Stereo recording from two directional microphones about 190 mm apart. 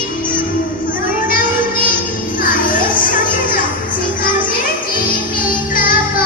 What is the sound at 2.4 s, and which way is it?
Music, 45° left (ahead or behind).